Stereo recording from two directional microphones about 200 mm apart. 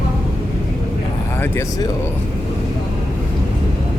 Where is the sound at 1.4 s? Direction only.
10° left (ahead or behind).